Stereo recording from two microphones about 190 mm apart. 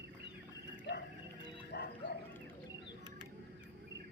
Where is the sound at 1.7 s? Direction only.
60° left (ahead or behind).